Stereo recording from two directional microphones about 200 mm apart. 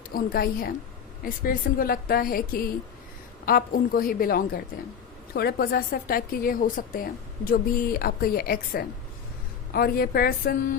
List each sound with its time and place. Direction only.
0.1 s a woman's voice: 45° left (ahead or behind)